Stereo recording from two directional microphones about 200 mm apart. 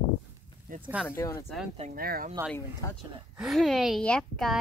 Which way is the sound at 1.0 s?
15° left (ahead or behind).